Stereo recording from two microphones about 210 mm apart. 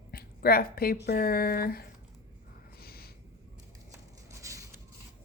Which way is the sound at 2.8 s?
45° left (ahead or behind).